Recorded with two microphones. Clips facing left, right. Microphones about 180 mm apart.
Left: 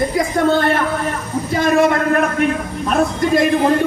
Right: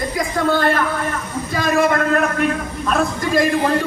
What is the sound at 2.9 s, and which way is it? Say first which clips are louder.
Speech: left 4 dB; 20° left (ahead or behind).